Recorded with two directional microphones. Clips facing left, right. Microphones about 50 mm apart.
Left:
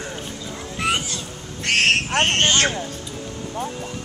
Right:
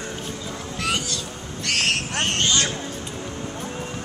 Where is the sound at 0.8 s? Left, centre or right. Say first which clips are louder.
Left 3 dB; left.